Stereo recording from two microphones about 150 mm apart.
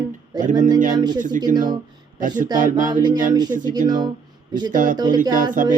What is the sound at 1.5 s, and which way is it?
Speech, 60° right (ahead or behind).